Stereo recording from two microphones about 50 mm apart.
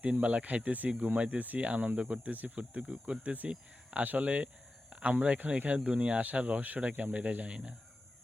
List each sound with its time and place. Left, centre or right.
0.0 s speech: right
2.8 s speech: centre
3.2 s speech: right